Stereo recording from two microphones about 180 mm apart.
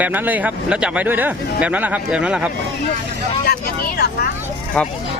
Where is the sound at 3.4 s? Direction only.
60° left (ahead or behind).